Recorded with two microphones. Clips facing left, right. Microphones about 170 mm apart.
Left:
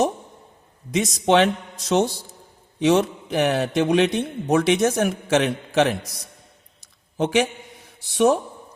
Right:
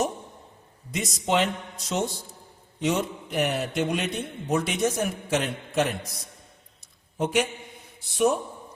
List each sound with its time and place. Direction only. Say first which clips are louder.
0.9 s a man's voice: left 8 dB; 90° left
7.2 s a man's voice: left 4 dB; 90° left